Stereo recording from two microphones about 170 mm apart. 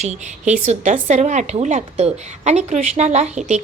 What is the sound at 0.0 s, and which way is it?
A woman's voice, 40° right (ahead or behind).